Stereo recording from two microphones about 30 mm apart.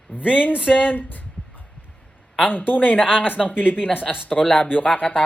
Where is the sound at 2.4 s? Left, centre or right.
Left.